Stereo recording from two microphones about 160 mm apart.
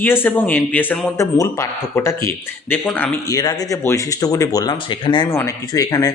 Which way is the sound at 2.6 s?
10° left (ahead or behind).